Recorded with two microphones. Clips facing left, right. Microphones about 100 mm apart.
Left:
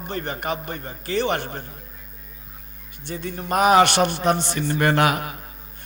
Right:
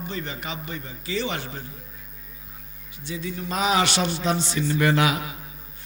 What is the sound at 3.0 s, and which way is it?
A man's voice, 55° left (ahead or behind).